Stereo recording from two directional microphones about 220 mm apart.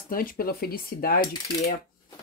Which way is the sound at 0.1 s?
40° left (ahead or behind).